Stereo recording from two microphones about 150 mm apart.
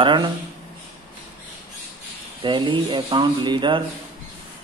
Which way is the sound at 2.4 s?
35° right (ahead or behind).